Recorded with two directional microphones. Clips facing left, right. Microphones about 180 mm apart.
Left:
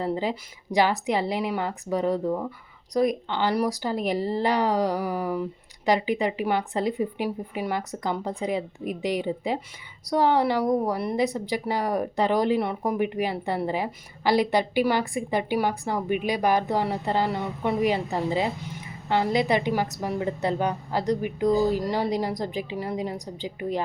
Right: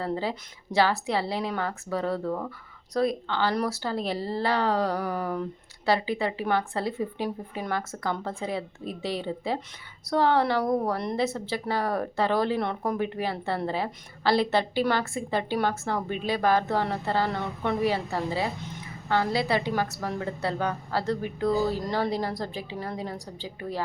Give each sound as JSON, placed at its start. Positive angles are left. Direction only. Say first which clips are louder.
{"t": 0.0, "sound": "a woman's voice", "louder": "left 3 dB", "side_deg": 15}